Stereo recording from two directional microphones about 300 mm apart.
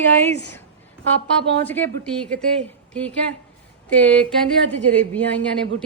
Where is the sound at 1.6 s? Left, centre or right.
Centre.